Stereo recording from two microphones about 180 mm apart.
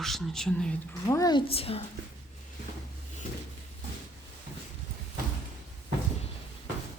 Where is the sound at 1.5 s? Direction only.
30° left (ahead or behind).